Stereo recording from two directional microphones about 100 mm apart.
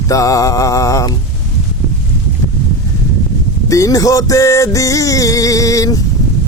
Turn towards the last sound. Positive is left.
turn(degrees=35)  # may be behind; listen again after turning